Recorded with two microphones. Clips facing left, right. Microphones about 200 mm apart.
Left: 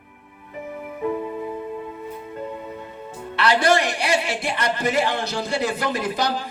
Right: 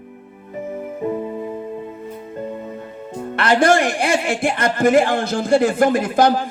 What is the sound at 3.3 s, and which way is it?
A man's voice, 50° right (ahead or behind).